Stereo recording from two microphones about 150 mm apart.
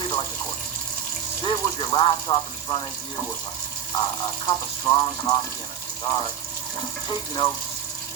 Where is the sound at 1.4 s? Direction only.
30° left (ahead or behind).